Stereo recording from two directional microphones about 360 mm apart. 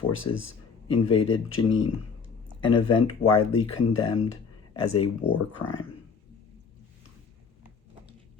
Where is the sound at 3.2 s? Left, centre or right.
Left.